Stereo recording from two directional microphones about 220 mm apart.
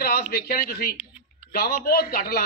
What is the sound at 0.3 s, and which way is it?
A man's voice, 45° left (ahead or behind).